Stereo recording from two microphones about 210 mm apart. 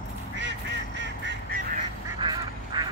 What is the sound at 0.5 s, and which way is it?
Honk, 60° right (ahead or behind).